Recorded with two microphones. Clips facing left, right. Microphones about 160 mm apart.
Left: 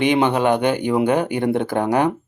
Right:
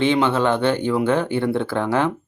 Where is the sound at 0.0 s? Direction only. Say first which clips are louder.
Left 1 dB; 15° left (ahead or behind).